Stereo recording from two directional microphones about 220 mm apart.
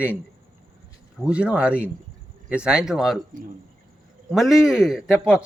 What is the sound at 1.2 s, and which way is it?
Speech, 5° right (ahead or behind).